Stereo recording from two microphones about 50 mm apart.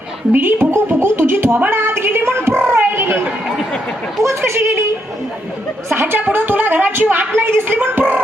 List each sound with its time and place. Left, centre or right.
0.3 s speech: right
4.2 s speech: right
5.9 s speech: right
6.1 s a woman's voice: right